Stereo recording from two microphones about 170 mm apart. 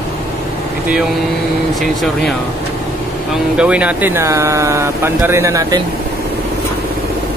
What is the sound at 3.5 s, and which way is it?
Speech, 5° right (ahead or behind).